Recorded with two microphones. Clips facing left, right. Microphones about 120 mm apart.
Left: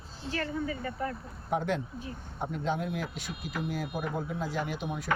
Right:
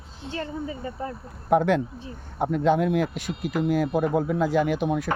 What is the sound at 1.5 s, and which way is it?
Speech, 75° right (ahead or behind).